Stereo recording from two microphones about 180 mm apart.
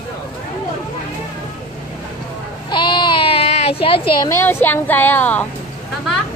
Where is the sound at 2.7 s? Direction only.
25° left (ahead or behind).